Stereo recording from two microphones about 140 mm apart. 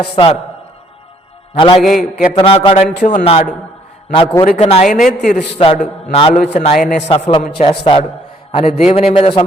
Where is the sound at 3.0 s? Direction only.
70° left (ahead or behind).